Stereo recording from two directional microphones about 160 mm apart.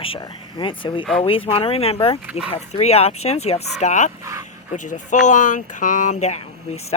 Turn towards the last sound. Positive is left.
turn(degrees=45)  # may be behind; listen again after turning